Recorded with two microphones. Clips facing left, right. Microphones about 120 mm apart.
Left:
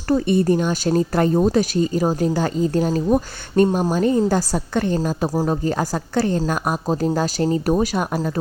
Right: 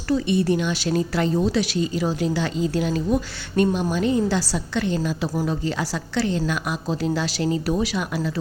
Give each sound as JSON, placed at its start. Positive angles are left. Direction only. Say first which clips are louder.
{"t": 0.1, "sound": "speech", "louder": "left 3 dB", "side_deg": 50}